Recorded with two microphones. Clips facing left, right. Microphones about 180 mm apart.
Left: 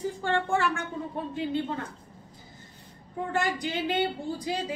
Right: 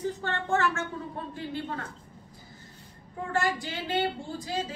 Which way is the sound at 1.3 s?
20° left (ahead or behind).